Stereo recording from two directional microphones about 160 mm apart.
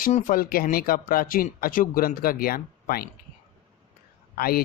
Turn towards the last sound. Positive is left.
turn(degrees=70)  # may be behind; listen again after turning